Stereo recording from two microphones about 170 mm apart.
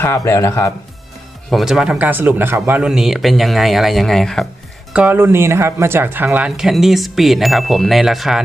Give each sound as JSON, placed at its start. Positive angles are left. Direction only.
{"t": 0.0, "sound": "speech", "side_deg": 15}
{"t": 1.5, "sound": "speech", "side_deg": 0}
{"t": 4.9, "sound": "speech", "side_deg": -10}